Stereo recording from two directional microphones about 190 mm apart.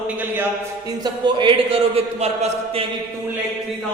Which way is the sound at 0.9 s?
25° right (ahead or behind).